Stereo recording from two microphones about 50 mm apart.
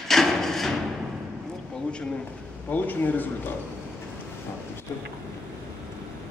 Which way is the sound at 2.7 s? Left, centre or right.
Left.